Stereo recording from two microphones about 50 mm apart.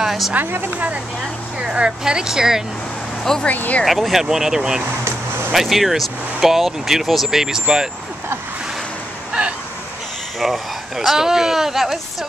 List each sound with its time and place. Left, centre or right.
0.0 s a sound: centre
0.3 s speech: right
1.6 s speech: centre
3.4 s speech: left
3.8 s speech: centre
10.4 s speech: centre